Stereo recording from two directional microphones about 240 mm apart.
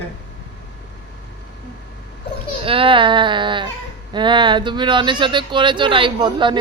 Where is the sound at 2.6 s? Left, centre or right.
Right.